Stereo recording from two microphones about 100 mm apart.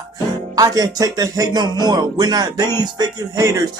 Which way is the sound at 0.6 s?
40° right (ahead or behind).